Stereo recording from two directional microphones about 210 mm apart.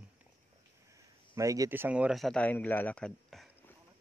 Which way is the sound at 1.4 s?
15° right (ahead or behind).